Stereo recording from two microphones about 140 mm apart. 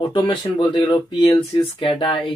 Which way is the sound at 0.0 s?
35° left (ahead or behind).